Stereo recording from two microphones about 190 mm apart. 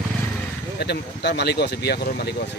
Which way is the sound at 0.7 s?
60° left (ahead or behind).